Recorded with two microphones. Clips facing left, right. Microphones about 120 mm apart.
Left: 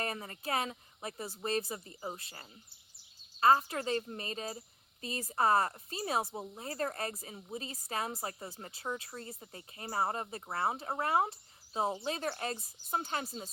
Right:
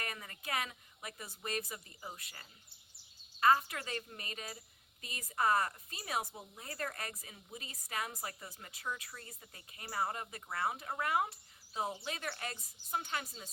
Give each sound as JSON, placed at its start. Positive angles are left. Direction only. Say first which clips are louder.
{"t": 0.0, "sound": "speech", "louder": "left 7 dB", "side_deg": 30}